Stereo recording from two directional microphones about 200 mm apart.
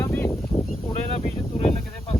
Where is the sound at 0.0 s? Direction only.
10° left (ahead or behind).